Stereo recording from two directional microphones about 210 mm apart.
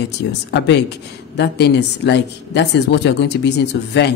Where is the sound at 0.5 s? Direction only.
55° left (ahead or behind).